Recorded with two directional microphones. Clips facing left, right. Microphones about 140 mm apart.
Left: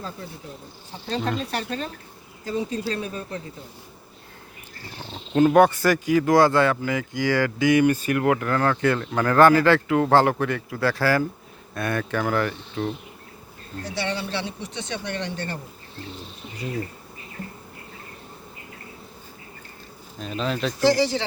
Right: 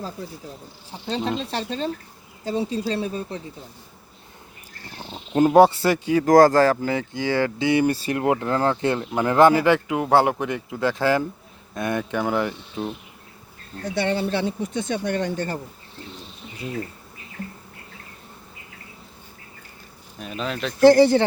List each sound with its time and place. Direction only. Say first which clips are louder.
1.0 s speech: right 1 dB; 20° right (ahead or behind)
4.9 s purr: even; 15° right (ahead or behind)
5.5 s speech: right 3 dB; 25° right (ahead or behind)
6.2 s speech: right 5 dB; 40° right (ahead or behind)
7.1 s speech: even; 25° right (ahead or behind)
13.8 s speech: right 5 dB; 50° right (ahead or behind)
20.1 s speech: left 2 dB; 5° right (ahead or behind)
20.8 s speech: right 8 dB; 55° right (ahead or behind)